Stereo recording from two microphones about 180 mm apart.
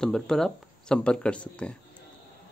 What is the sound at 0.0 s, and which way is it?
Speech, 5° left (ahead or behind).